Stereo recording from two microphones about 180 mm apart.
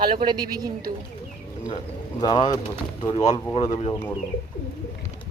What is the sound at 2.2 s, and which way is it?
Speech, 25° left (ahead or behind).